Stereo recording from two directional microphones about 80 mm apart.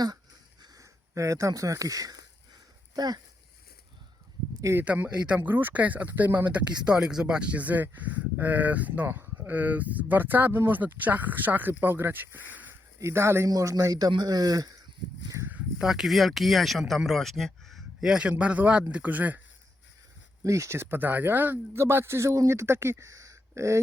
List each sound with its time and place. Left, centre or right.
0.6 s a sound: right
4.6 s a man's voice: right
5.0 s speech: centre
6.9 s speech: centre
13.0 s a man's voice: right
13.5 s a man's voice: right
15.8 s speech: centre; by 19.4 s right
20.4 s a man's voice: right